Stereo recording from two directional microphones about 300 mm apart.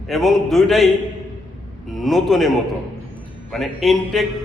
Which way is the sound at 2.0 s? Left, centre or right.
Centre.